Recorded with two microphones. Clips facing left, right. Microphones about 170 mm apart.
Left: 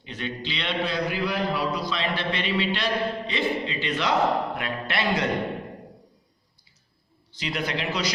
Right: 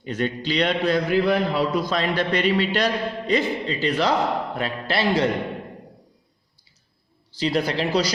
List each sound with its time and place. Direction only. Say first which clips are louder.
0.0 s a man's voice: right 7 dB; 45° right (ahead or behind)
7.3 s a man's voice: right 7 dB; 35° right (ahead or behind)